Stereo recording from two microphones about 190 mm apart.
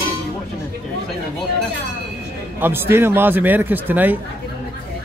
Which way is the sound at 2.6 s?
10° right (ahead or behind).